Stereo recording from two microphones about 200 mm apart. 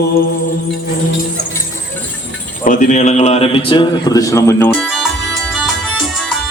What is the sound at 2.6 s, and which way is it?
A man's voice, 35° left (ahead or behind).